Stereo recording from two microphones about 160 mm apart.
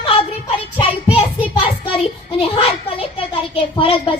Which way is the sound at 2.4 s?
35° left (ahead or behind).